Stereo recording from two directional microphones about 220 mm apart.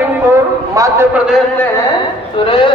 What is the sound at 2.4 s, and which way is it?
Speech, 20° left (ahead or behind).